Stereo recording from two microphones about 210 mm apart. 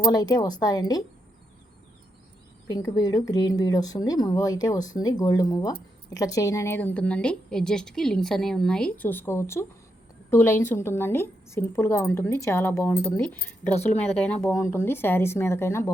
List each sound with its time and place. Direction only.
0.0 s a woman's voice: 20° left (ahead or behind)
2.6 s speech: 15° left (ahead or behind)